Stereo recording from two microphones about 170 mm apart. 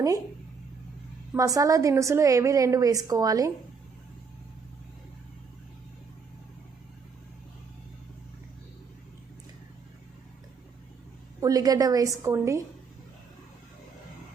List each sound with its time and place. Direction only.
1.3 s a woman's voice: 20° right (ahead or behind)
11.3 s a woman's voice: 20° right (ahead or behind)